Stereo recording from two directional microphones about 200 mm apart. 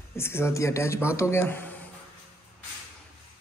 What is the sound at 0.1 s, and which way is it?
Speech, 10° left (ahead or behind).